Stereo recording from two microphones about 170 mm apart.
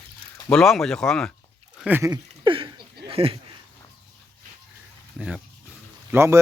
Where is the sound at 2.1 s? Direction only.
30° right (ahead or behind).